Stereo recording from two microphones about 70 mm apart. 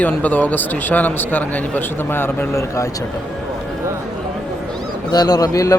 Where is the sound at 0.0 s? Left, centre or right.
Left.